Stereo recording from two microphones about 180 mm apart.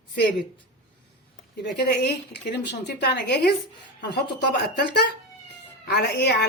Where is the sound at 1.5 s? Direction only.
65° left (ahead or behind).